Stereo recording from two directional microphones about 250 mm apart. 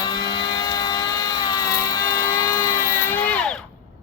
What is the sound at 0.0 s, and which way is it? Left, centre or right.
Vehicle, centre.